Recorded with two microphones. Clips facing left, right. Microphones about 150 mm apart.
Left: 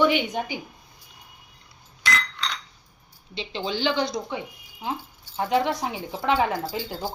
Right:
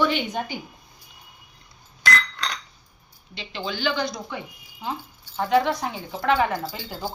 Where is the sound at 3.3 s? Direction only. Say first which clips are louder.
Left 2 dB; 25° left (ahead or behind).